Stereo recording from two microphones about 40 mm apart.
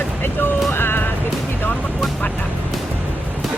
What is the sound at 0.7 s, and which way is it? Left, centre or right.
Music, left.